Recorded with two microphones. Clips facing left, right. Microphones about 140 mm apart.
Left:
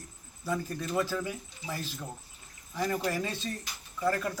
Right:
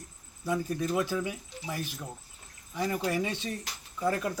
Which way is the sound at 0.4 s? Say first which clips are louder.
Right 3 dB; 15° right (ahead or behind).